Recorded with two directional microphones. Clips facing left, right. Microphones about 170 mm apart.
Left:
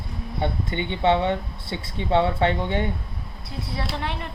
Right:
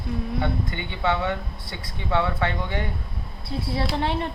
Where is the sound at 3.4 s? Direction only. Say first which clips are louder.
Right 4 dB; 30° right (ahead or behind).